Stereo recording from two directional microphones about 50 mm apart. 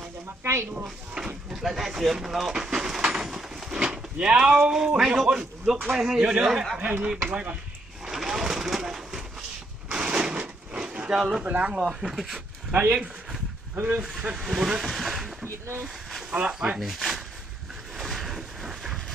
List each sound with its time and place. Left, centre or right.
0.4 s speech: right
0.7 s speech: centre
1.5 s speech: centre
2.5 s a sound: centre
4.9 s speech: centre
6.8 s speech: right
8.0 s a sound: centre
9.8 s a sound: centre
11.4 s speech: right
11.8 s speech: centre
16.3 s speech: centre
17.9 s a sound: centre